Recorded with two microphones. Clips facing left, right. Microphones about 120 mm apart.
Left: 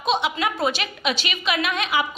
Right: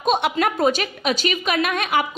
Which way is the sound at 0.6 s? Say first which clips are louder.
Right 4 dB; 45° right (ahead or behind).